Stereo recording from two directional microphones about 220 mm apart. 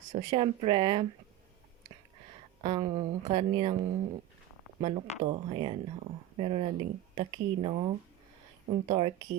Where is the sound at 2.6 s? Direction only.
20° right (ahead or behind).